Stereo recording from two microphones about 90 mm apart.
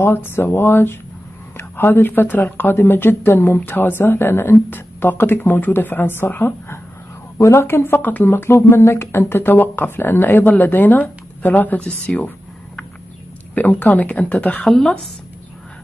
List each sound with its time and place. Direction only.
0.0 s speech: 25° left (ahead or behind)
11.8 s speech: 10° left (ahead or behind)
13.6 s a woman's voice: 20° left (ahead or behind)